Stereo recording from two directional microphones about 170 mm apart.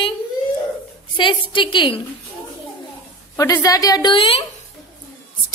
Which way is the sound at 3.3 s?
20° left (ahead or behind).